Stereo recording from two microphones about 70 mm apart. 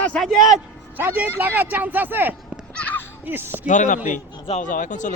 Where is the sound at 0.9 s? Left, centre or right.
Right.